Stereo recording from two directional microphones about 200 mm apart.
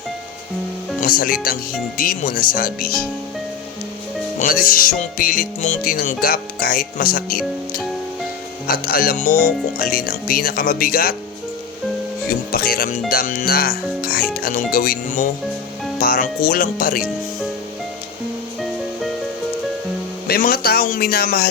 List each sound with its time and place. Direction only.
1.0 s speech: 45° left (ahead or behind)
4.4 s speech: 45° left (ahead or behind)
12.5 s speech: 50° left (ahead or behind)
20.2 s speech: 50° left (ahead or behind)